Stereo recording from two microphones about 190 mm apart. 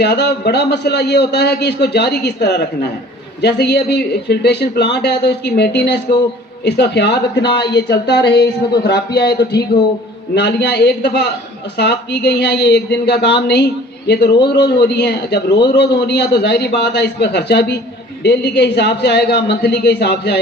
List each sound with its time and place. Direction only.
0.0 s a man's voice: 60° left (ahead or behind)